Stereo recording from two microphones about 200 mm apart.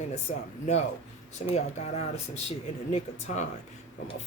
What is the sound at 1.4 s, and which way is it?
Speech, 35° left (ahead or behind).